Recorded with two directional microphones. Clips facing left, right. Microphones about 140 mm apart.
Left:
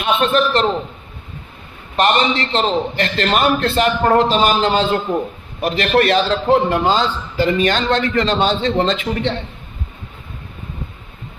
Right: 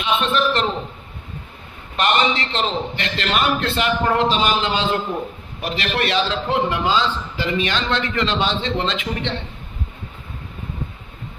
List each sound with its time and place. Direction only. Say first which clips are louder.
0.0 s a man's voice: left 4 dB; 45° left (ahead or behind)
2.0 s a man's voice: left 3 dB; 35° left (ahead or behind)